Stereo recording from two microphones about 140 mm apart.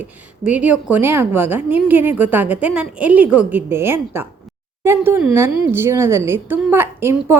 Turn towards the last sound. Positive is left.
turn(degrees=-15)  # may be behind; listen again after turning